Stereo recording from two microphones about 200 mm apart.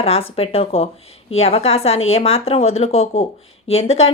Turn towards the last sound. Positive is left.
turn(degrees=30)  # may be behind; listen again after turning